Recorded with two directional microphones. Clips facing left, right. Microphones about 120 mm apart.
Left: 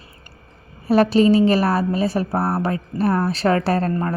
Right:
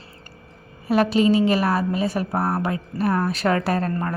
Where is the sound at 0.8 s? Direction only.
35° left (ahead or behind).